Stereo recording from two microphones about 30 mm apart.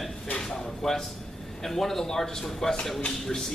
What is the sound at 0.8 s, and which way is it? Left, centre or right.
A man's voice, centre.